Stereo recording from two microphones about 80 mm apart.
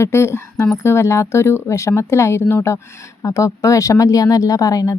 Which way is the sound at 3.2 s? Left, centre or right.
Left.